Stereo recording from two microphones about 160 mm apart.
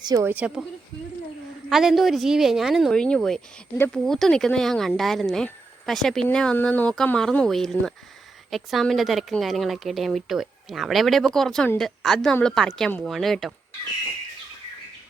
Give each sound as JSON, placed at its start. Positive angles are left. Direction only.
{"t": 0.0, "sound": "a woman's voice", "side_deg": -25}
{"t": 0.3, "sound": "a woman's voice", "side_deg": -5}
{"t": 1.7, "sound": "speech", "side_deg": 0}